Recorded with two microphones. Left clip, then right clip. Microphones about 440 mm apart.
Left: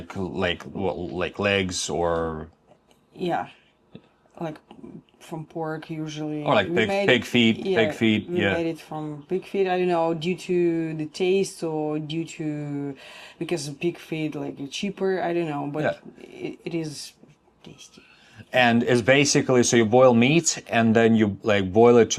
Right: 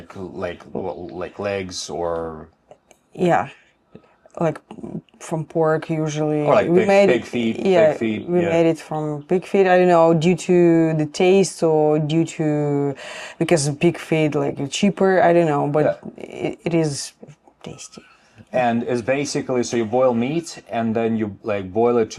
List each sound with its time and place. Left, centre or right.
0.1 s speech: centre
3.2 s speech: right
6.5 s speech: centre
6.8 s speech: right
7.1 s speech: centre
7.5 s speech: right
18.5 s speech: left